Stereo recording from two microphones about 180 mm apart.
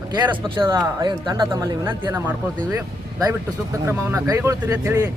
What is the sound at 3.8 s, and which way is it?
Speech, 15° right (ahead or behind).